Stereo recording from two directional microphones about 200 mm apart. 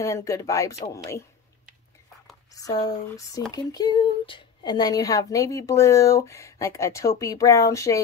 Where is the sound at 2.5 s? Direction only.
20° left (ahead or behind).